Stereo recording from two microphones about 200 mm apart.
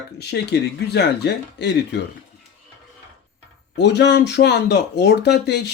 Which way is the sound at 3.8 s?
60° left (ahead or behind).